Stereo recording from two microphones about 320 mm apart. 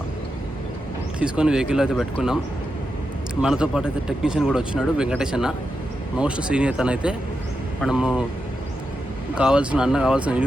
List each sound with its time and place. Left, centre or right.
1.2 s speech: centre
3.4 s speech: centre
9.3 s speech: centre